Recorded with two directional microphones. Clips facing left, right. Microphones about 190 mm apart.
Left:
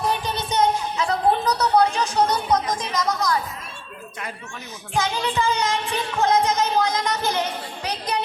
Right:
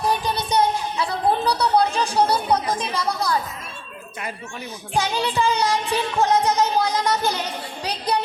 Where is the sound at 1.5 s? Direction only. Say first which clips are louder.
Even; 30° right (ahead or behind).